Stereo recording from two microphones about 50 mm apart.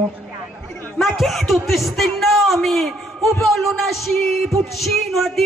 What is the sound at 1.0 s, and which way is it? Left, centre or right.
A man's voice, centre.